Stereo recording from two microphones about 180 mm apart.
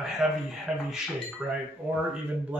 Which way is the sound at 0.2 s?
Centre (ahead or behind).